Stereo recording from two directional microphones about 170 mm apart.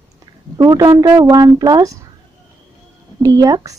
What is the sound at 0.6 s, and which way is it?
A woman's voice, 15° right (ahead or behind).